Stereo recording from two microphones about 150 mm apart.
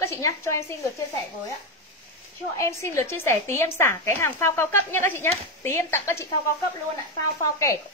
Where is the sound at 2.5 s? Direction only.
20° left (ahead or behind).